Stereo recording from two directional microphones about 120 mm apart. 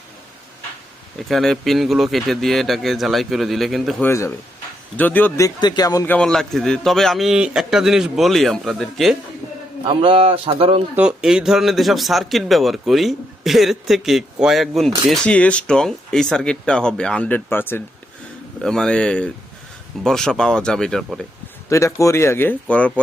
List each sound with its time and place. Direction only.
1.3 s a man's voice: centre (ahead or behind)
4.0 s speech: 25° left (ahead or behind)
5.5 s speech: 35° left (ahead or behind)
6.1 s a man's voice: 5° left (ahead or behind)
9.8 s speech: 50° right (ahead or behind)
10.9 s a man's voice: 5° right (ahead or behind); by 17.8 s 20° left (ahead or behind)
18.6 s a man's voice: 5° left (ahead or behind)
21.7 s speech: 25° left (ahead or behind)